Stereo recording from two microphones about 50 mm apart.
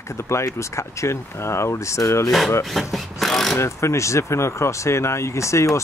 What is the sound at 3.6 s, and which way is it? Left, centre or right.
Speech, left.